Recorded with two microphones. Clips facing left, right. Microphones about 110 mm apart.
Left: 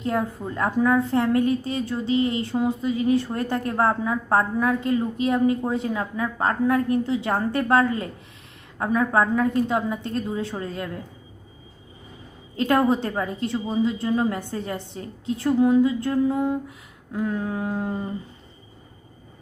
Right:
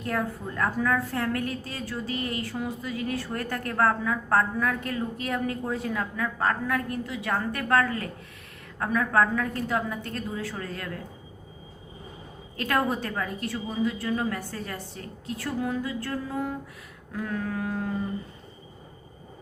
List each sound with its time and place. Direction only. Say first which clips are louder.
0.0 s a woman's voice: left 4 dB; 25° left (ahead or behind)
12.5 s a woman's voice: left 6 dB; 25° left (ahead or behind)